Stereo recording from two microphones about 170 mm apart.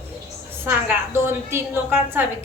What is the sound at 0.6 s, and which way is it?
A woman's voice, 10° right (ahead or behind).